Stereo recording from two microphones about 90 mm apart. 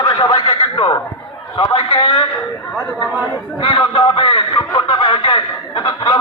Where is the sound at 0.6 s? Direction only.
75° left (ahead or behind).